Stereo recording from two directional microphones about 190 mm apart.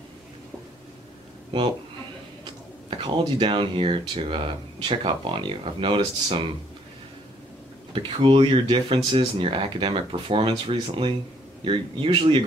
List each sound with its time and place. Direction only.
2.4 s speech: 25° right (ahead or behind)
7.9 s speech: 25° right (ahead or behind)